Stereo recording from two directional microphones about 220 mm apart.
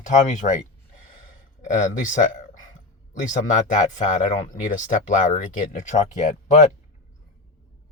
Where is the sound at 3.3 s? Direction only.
35° left (ahead or behind).